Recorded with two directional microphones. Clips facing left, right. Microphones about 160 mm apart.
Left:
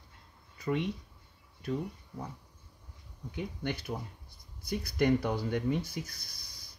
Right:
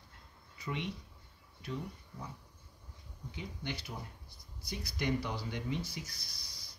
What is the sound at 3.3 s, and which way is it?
Speech, 55° left (ahead or behind).